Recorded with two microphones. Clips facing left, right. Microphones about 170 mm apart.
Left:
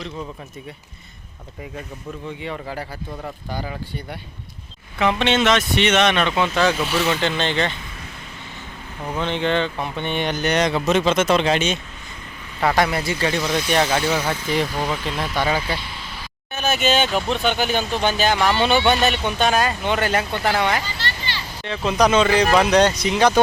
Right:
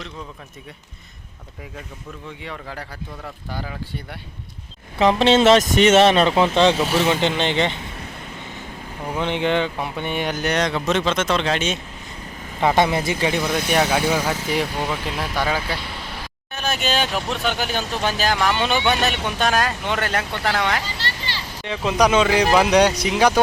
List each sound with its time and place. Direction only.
2.4 s speech: 5° left (ahead or behind)
4.9 s speech: 35° right (ahead or behind); by 7.8 s 20° right (ahead or behind)
9.0 s speech: 15° right (ahead or behind)
12.5 s speech: 20° right (ahead or behind)
13.4 s speech: 55° right (ahead or behind)
13.7 s speech: 10° right (ahead or behind)
21.6 s speech: 15° right (ahead or behind)